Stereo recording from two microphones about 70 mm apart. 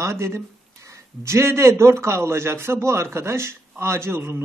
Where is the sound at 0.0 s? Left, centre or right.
Right.